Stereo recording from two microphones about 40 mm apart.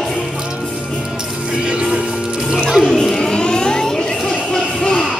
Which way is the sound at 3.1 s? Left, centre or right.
Left.